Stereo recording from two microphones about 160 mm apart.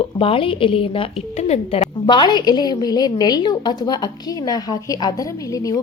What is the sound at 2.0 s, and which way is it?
A woman's voice, 30° left (ahead or behind).